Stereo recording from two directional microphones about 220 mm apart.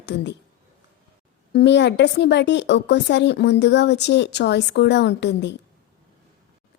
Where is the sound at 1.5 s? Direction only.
50° left (ahead or behind).